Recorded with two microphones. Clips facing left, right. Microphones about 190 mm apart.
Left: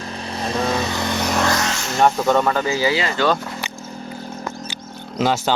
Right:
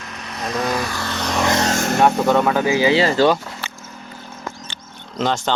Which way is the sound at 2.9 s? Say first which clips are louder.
Right 6 dB; 30° right (ahead or behind).